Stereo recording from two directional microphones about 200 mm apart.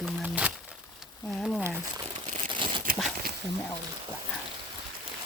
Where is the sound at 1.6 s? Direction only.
15° right (ahead or behind).